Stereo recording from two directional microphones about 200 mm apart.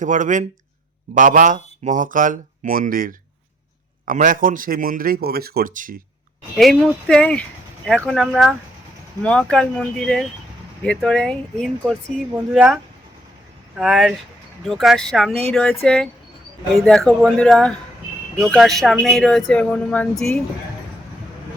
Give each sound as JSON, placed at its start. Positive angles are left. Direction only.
{"t": 0.0, "sound": "speech", "side_deg": -40}
{"t": 6.6, "sound": "speech", "side_deg": 0}